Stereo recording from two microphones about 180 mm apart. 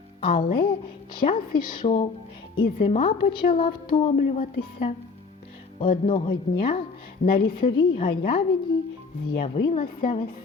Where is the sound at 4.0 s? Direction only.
40° left (ahead or behind).